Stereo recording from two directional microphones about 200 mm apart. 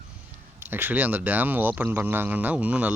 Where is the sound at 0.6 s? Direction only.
10° right (ahead or behind).